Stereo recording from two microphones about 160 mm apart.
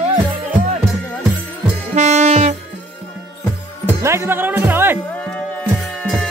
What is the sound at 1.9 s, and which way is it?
Music, 45° right (ahead or behind).